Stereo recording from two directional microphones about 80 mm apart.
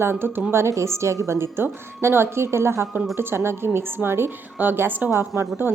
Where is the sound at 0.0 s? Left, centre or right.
Right.